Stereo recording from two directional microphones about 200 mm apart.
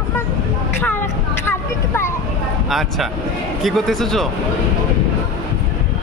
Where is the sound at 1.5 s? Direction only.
10° left (ahead or behind).